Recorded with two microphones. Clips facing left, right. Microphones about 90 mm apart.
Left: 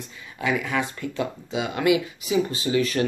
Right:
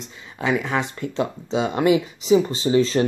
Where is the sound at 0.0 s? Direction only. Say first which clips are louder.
Right 2 dB; 25° right (ahead or behind).